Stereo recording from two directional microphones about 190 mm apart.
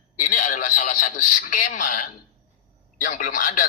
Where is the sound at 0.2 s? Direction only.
45° left (ahead or behind).